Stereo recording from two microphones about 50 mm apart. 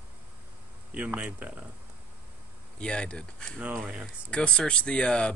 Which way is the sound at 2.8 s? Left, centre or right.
Left.